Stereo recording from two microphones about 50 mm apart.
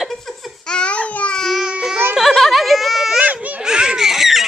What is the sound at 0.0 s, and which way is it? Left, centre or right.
Babbling, centre.